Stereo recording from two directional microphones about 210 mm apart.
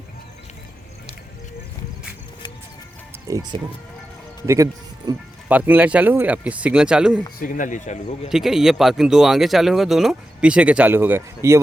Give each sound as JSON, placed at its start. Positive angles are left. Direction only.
{"t": 3.2, "sound": "speech", "side_deg": -15}
{"t": 7.3, "sound": "speech", "side_deg": 40}
{"t": 8.3, "sound": "speech", "side_deg": 0}